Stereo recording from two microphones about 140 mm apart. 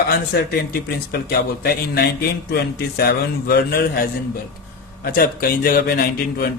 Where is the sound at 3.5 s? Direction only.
90° left.